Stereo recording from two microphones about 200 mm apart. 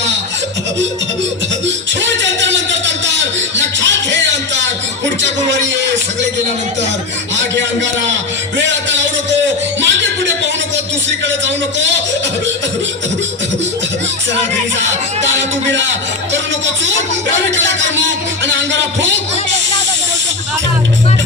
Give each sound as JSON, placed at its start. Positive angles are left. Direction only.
{"t": 1.6, "sound": "a sound", "side_deg": -65}
{"t": 8.5, "sound": "music", "side_deg": -65}
{"t": 11.4, "sound": "speech", "side_deg": -65}
{"t": 14.8, "sound": "speech", "side_deg": -65}
{"t": 17.6, "sound": "speech", "side_deg": -65}